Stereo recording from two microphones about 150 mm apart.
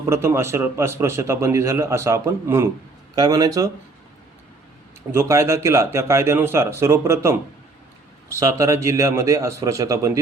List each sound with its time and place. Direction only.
0.0 s a man's voice: 15° right (ahead or behind)
5.1 s a man's voice: 20° right (ahead or behind)